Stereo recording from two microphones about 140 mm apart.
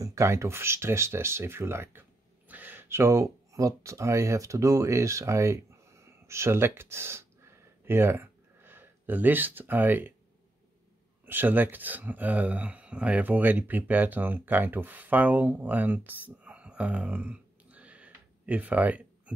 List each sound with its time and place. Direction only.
0.0 s speech: 20° right (ahead or behind)
11.2 s speech: 15° right (ahead or behind)